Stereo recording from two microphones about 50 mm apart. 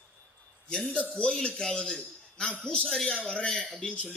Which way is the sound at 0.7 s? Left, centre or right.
Centre.